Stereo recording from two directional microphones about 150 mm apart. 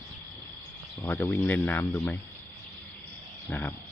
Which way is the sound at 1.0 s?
15° left (ahead or behind).